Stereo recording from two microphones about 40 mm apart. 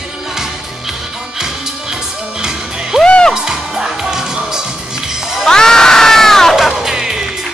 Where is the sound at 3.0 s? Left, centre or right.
Left.